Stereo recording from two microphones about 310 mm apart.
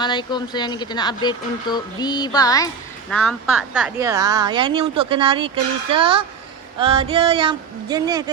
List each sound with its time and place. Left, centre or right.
0.0 s speech: centre
3.1 s speech: centre